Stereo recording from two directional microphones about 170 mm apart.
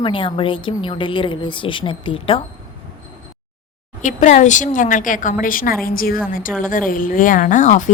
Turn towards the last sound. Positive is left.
turn(degrees=45)  # may be behind; listen again after turning